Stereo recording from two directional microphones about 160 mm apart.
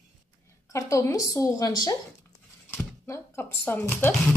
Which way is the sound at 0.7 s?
20° left (ahead or behind).